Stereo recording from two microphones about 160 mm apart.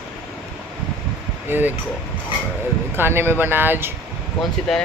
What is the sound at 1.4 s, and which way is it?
Speech, 10° right (ahead or behind).